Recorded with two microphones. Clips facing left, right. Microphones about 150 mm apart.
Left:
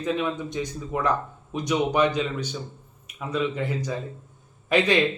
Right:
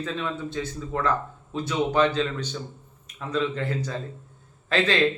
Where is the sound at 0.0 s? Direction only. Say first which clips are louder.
Left 4 dB; 15° left (ahead or behind).